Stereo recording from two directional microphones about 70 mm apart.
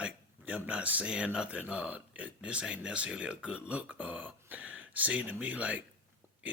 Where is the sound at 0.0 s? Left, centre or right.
Centre.